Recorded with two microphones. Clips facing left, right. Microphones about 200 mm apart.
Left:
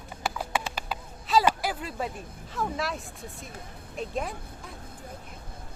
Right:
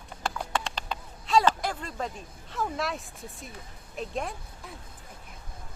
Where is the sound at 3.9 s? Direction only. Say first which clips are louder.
Left 1 dB; centre (ahead or behind).